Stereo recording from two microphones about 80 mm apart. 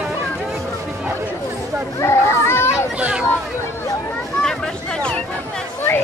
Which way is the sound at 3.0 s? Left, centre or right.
Centre.